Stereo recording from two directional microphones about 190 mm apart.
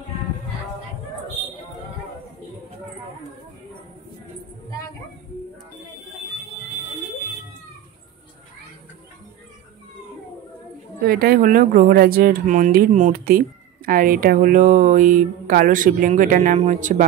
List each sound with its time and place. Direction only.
11.0 s speech: 50° right (ahead or behind)